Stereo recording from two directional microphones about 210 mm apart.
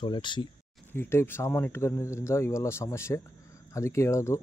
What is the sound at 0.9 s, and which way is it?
Speech, 10° left (ahead or behind).